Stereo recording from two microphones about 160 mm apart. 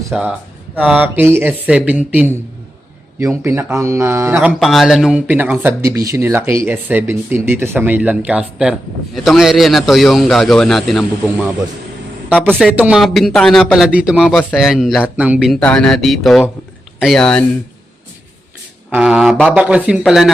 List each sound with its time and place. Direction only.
0.1 s a man's voice: 5° right (ahead or behind)
4.6 s a man's voice: centre (ahead or behind)
12.3 s speech: 5° left (ahead or behind)
12.7 s speech: 10° right (ahead or behind)
13.0 s a man's voice: centre (ahead or behind)
15.6 s a man's voice: 5° left (ahead or behind)
18.9 s a man's voice: 5° right (ahead or behind)